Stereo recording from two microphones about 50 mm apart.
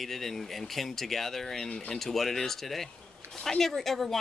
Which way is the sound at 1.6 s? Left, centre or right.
Centre.